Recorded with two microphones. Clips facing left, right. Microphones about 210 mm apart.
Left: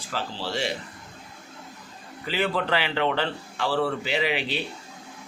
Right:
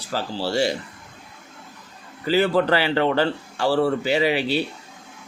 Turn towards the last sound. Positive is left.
turn(degrees=-40)  # may be behind; listen again after turning